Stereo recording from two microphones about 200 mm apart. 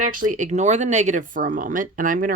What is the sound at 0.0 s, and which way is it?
Speech, 40° right (ahead or behind).